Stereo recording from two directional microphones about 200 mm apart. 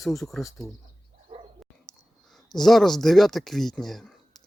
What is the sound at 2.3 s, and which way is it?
Speech, centre (ahead or behind).